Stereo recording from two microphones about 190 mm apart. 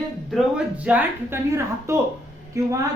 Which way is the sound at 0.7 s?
5° right (ahead or behind).